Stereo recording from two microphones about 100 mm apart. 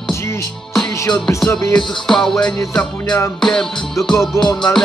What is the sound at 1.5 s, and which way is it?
Music, 30° left (ahead or behind).